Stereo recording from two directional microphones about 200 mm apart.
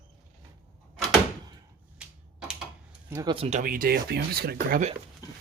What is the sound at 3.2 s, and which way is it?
Speech, 30° right (ahead or behind).